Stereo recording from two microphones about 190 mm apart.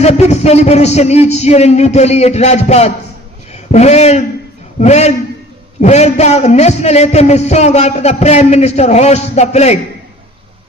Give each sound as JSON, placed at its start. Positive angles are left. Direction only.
{"t": 0.0, "sound": "a man's voice", "side_deg": 35}